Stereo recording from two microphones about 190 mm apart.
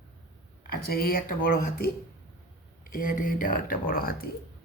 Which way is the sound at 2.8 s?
45° left (ahead or behind).